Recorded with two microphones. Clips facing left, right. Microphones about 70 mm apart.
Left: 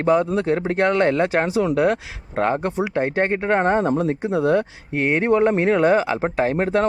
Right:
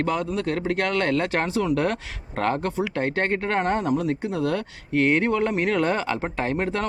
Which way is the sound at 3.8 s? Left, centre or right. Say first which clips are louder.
Left 3 dB; left.